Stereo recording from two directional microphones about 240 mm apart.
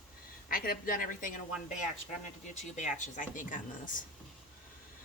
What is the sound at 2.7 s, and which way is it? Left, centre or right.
Speech, left.